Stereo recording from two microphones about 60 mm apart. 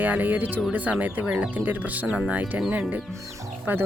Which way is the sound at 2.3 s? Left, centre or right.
Right.